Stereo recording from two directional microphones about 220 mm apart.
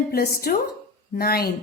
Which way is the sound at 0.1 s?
45° left (ahead or behind).